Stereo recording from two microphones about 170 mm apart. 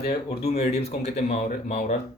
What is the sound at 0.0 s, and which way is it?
Speech, 35° left (ahead or behind).